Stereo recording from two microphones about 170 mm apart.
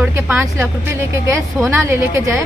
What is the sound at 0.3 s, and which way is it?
Speech, 15° right (ahead or behind).